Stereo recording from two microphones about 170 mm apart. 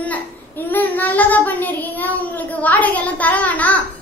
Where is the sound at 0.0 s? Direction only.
10° left (ahead or behind).